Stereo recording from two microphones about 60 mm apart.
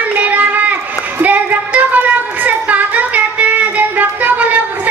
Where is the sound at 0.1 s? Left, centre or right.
Right.